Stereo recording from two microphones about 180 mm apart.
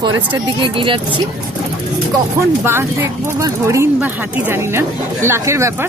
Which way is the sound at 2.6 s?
15° right (ahead or behind).